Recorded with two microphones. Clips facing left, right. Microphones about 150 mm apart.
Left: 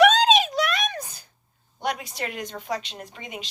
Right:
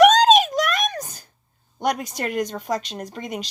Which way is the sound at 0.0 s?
45° right (ahead or behind).